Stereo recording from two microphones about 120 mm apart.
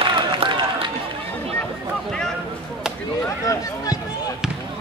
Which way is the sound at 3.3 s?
30° left (ahead or behind).